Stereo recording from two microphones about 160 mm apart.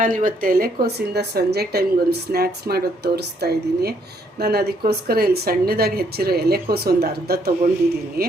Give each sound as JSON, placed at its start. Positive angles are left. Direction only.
{"t": 0.0, "sound": "speech", "side_deg": -60}